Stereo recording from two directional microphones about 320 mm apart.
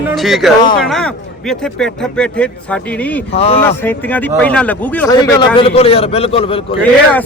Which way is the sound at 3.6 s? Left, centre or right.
Centre.